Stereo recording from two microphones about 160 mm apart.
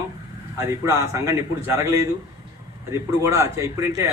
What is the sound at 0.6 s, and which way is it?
A man's voice, 20° right (ahead or behind).